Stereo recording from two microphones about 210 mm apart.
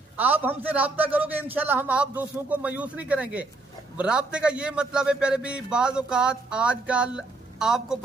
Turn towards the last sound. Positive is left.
turn(degrees=-5)  # may be behind; listen again after turning